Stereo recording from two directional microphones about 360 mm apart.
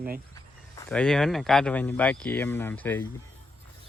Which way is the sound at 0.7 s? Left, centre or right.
Centre.